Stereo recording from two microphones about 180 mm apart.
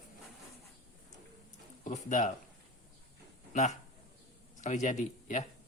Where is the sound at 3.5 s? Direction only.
40° left (ahead or behind).